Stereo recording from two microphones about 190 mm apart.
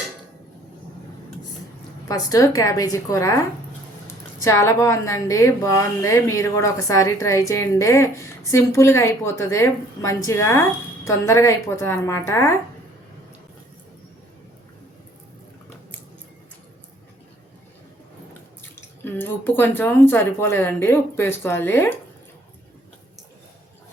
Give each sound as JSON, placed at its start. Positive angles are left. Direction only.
{"t": 2.0, "sound": "a woman's voice", "side_deg": 20}
{"t": 19.0, "sound": "a woman's voice", "side_deg": 10}